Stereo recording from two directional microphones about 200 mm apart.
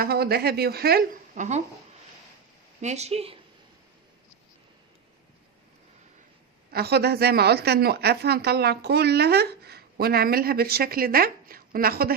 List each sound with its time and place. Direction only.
0.0 s a woman's voice: 50° right (ahead or behind)
2.8 s speech: 35° right (ahead or behind)
6.7 s a woman's voice: 55° right (ahead or behind)